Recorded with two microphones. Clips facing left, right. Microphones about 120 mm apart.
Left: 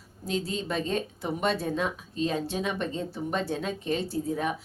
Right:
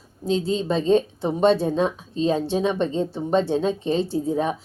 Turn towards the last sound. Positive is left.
turn(degrees=-30)  # may be behind; listen again after turning